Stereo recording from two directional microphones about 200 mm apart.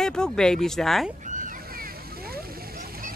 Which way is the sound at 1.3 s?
40° right (ahead or behind).